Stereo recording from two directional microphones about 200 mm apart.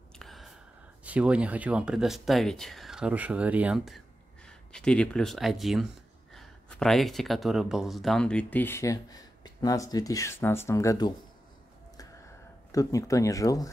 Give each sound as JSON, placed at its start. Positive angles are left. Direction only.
{"t": 0.2, "sound": "a sound", "side_deg": 0}
{"t": 1.0, "sound": "speech", "side_deg": -5}
{"t": 12.7, "sound": "speech", "side_deg": 15}